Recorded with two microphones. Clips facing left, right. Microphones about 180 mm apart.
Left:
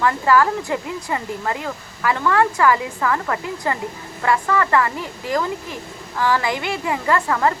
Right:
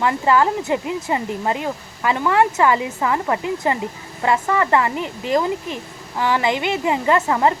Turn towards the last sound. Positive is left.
turn(degrees=-20)  # may be behind; listen again after turning